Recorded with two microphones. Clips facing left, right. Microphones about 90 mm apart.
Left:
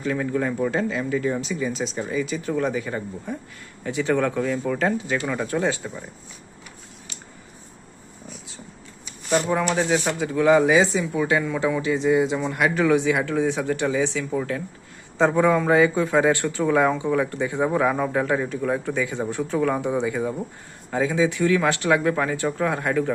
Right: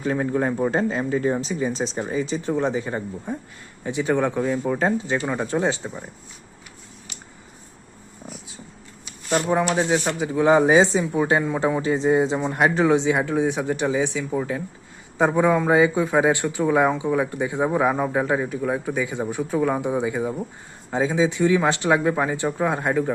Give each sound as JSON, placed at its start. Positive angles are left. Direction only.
{"t": 0.0, "sound": "speech", "side_deg": -35}
{"t": 9.5, "sound": "a man's voice", "side_deg": -20}